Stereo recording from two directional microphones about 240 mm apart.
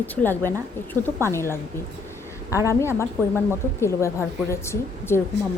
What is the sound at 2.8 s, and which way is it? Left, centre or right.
Speech, centre.